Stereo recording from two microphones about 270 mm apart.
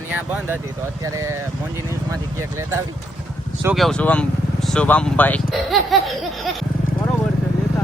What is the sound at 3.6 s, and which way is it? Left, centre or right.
Speech, centre.